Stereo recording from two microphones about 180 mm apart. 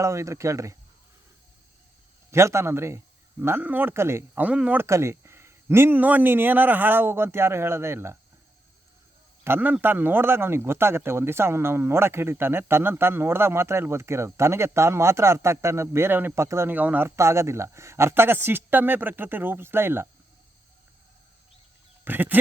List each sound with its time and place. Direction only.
0.0 s speech: 15° right (ahead or behind)
2.3 s speech: 15° right (ahead or behind)
9.4 s speech: 10° right (ahead or behind)
22.0 s speech: 10° right (ahead or behind)